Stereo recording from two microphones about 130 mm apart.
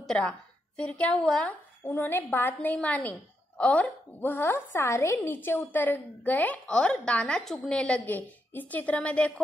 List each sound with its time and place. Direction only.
0.0 s a woman's voice: 5° left (ahead or behind)